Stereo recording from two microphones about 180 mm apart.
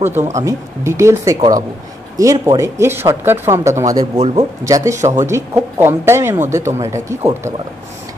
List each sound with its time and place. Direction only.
0.0 s speech: 15° right (ahead or behind)